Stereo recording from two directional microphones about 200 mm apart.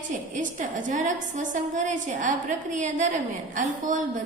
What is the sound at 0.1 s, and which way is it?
A woman's voice, 40° right (ahead or behind).